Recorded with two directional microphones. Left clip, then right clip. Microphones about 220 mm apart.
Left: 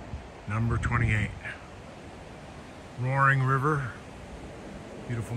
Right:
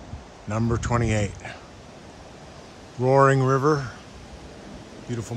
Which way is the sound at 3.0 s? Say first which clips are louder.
Right 7 dB; 15° right (ahead or behind).